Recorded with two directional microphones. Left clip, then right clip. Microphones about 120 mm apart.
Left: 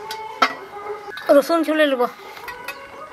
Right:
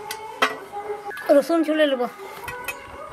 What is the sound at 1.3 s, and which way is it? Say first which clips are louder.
Speech: left 3 dB; 30° left (ahead or behind).